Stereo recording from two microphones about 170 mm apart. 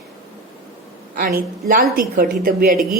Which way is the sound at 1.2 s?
60° right (ahead or behind).